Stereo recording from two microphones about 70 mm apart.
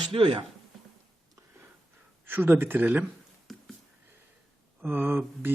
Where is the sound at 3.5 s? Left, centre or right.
Centre.